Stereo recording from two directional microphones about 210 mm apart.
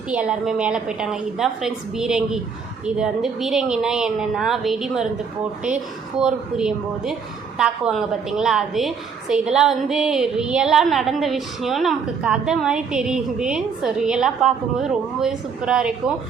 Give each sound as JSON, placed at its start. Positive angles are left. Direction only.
{"t": 0.1, "sound": "a woman's voice", "side_deg": -5}